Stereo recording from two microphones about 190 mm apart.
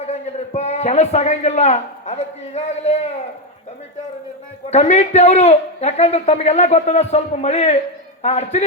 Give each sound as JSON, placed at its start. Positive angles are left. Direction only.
{"t": 0.0, "sound": "a man's voice", "side_deg": 35}
{"t": 4.7, "sound": "speech", "side_deg": 35}